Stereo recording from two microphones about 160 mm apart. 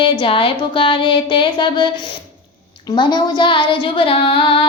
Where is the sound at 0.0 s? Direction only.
35° left (ahead or behind).